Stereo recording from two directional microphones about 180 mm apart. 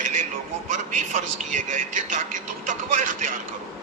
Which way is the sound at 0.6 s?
45° right (ahead or behind).